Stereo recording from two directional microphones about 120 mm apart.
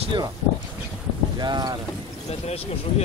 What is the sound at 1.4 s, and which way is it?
Speech, 35° right (ahead or behind).